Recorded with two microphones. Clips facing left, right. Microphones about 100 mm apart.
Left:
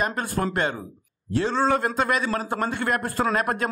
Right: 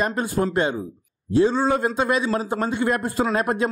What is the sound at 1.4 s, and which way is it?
Speech, 10° right (ahead or behind).